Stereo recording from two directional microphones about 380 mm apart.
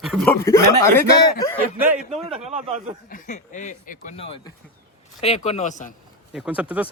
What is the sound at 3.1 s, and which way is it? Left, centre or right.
Speech, centre.